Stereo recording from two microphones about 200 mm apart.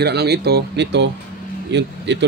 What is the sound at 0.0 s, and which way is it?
A man's voice, 55° right (ahead or behind).